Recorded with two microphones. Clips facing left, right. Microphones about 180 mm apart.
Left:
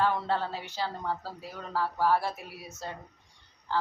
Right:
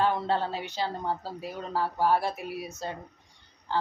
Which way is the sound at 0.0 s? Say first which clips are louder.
Right 2 dB; 20° right (ahead or behind).